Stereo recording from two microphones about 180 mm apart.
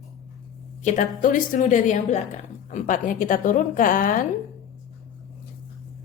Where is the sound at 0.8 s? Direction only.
40° left (ahead or behind).